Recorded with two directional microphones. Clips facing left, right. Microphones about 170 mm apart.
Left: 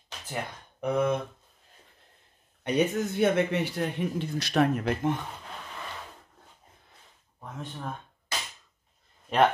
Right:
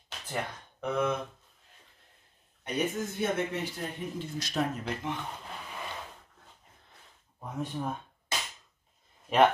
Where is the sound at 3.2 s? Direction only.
75° left (ahead or behind).